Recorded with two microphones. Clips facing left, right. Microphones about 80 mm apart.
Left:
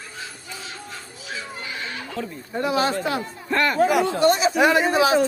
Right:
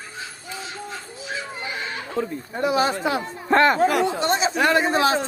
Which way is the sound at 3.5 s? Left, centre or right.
Right.